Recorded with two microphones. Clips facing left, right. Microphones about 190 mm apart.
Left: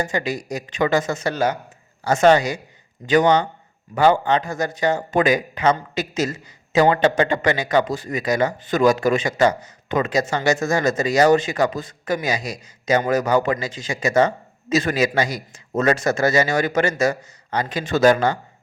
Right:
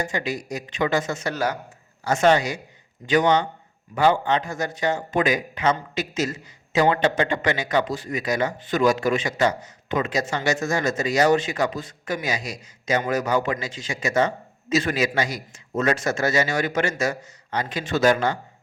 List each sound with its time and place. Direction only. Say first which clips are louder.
0.0 s speech: left 3 dB; 40° left (ahead or behind)
2.0 s a man's voice: left 4 dB; 40° left (ahead or behind)